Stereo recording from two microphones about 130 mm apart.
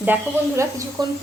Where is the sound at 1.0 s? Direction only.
35° right (ahead or behind).